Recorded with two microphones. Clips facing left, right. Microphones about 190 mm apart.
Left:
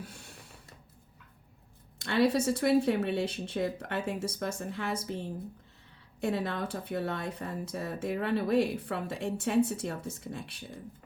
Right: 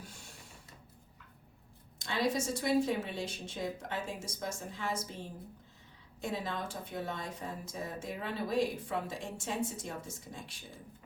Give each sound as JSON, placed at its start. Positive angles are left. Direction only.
{"t": 2.0, "sound": "speech", "side_deg": 60}
{"t": 6.2, "sound": "speech", "side_deg": 60}